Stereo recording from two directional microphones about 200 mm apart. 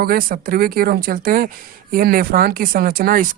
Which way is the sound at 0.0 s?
45° right (ahead or behind).